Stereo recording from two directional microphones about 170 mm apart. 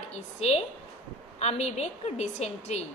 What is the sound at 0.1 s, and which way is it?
A woman's voice, 40° left (ahead or behind).